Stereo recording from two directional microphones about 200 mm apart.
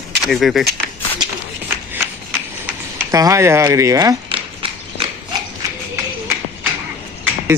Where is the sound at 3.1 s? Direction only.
15° right (ahead or behind).